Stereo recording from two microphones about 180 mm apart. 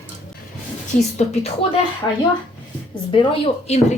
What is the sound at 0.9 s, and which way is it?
Speech, 40° left (ahead or behind).